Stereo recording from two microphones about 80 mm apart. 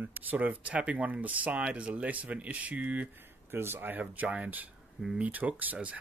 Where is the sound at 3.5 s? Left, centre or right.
Right.